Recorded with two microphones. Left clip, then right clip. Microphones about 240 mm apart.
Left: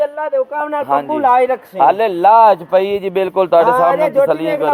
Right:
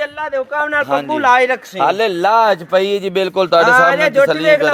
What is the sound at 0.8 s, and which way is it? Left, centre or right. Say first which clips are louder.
A man's voice: left 3 dB; right.